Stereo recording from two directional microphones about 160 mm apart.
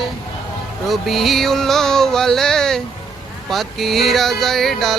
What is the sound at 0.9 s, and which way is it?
Music, centre (ahead or behind).